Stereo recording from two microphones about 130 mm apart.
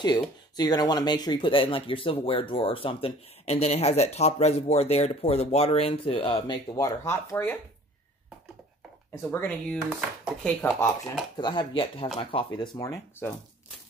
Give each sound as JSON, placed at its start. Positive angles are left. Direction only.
{"t": 0.0, "sound": "speech", "side_deg": 30}
{"t": 9.3, "sound": "speech", "side_deg": 10}
{"t": 11.3, "sound": "speech", "side_deg": 35}
{"t": 12.7, "sound": "speech", "side_deg": 25}